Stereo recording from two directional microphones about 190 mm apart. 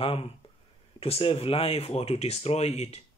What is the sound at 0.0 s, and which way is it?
Speech, 30° left (ahead or behind).